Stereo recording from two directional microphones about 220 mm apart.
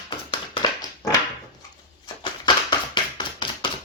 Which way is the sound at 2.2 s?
20° left (ahead or behind).